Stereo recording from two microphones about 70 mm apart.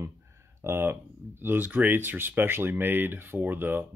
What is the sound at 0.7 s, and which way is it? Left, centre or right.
Speech, right.